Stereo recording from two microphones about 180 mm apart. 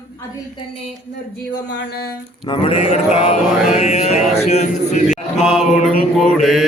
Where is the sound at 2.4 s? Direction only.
30° left (ahead or behind).